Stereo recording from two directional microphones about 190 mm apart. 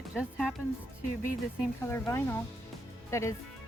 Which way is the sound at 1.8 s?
15° left (ahead or behind).